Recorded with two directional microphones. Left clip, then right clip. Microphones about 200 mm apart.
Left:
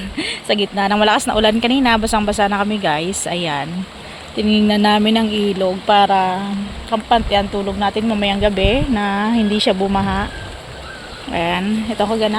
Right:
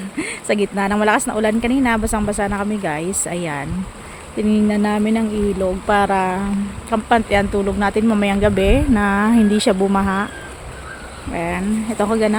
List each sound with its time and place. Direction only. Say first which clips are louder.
0.2 s speech: left 1 dB; 15° right (ahead or behind)
5.9 s speech: left 4 dB; 15° right (ahead or behind)
11.3 s speech: left 4 dB; 5° right (ahead or behind)
11.9 s speech: even; 20° right (ahead or behind)